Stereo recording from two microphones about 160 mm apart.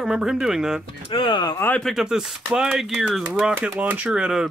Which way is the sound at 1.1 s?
30° left (ahead or behind).